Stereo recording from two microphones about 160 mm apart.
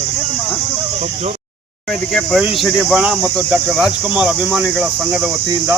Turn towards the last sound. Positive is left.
turn(degrees=-10)  # may be behind; listen again after turning